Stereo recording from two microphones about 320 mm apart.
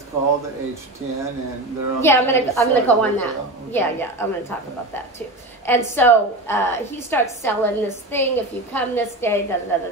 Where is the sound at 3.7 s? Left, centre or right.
Centre.